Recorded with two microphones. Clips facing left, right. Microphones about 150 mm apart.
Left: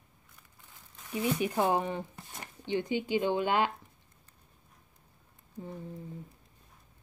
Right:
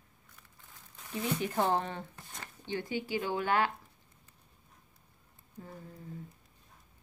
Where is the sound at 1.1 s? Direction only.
15° left (ahead or behind).